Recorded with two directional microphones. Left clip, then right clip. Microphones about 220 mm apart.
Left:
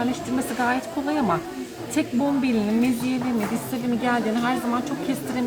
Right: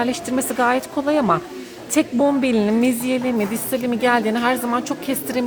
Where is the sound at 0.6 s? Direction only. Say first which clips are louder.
Right 6 dB; 50° right (ahead or behind).